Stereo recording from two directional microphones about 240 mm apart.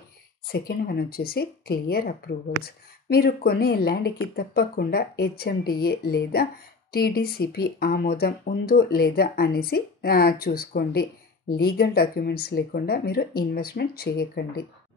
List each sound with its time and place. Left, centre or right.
0.5 s speech: left